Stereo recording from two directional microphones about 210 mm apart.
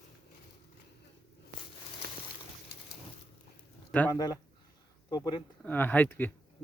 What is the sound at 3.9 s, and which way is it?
Speech, 5° left (ahead or behind).